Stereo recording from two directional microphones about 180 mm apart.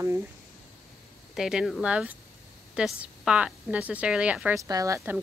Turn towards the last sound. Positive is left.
turn(degrees=-15)  # may be behind; listen again after turning